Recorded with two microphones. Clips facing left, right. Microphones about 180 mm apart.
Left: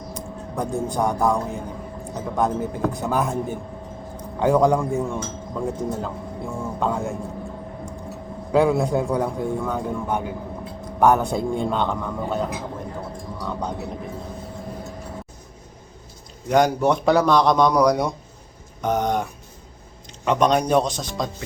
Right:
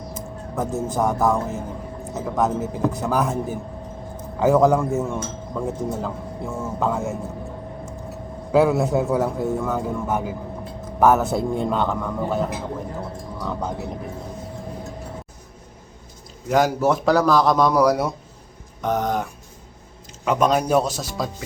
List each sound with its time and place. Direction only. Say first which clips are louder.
0.1 s a man's voice: left 1 dB; 5° right (ahead or behind)
8.5 s speech: right 1 dB; 5° right (ahead or behind)
16.5 s speech: left 1 dB; 5° right (ahead or behind)